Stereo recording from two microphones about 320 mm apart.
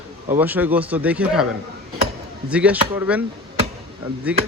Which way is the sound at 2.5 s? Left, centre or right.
Centre.